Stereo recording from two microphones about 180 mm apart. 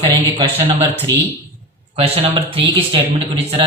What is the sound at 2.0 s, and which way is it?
Speech, 30° right (ahead or behind).